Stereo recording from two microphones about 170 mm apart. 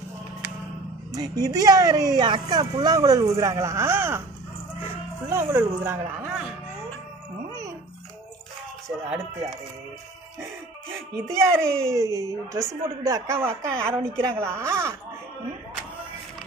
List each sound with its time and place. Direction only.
1.1 s speech: 20° right (ahead or behind)
5.2 s a woman's voice: 15° right (ahead or behind)
11.2 s a woman's voice: 15° right (ahead or behind)